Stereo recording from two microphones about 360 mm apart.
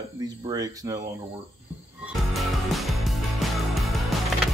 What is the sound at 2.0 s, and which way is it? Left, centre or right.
Music, centre.